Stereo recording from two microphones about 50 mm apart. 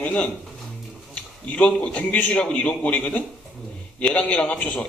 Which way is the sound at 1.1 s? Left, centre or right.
Left.